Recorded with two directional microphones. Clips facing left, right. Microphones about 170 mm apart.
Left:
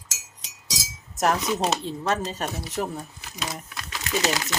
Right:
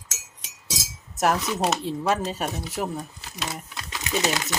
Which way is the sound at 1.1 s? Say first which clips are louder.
Even; 5° right (ahead or behind).